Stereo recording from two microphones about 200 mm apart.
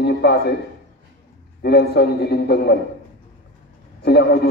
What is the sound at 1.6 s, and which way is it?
A man's voice, 55° left (ahead or behind).